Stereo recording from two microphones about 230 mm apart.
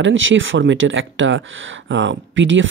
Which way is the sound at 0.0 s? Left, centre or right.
Right.